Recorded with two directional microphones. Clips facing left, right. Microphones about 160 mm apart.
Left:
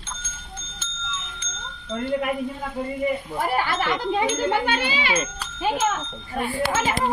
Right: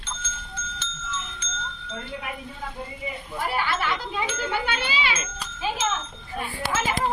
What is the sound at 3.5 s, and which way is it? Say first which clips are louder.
A child's voice: left 3 dB; 45° left (ahead or behind).